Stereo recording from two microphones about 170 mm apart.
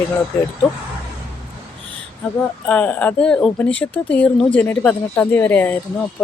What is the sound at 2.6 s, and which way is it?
Speech, 5° left (ahead or behind).